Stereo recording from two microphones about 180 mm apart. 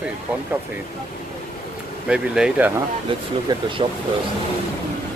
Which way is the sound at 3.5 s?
30° right (ahead or behind).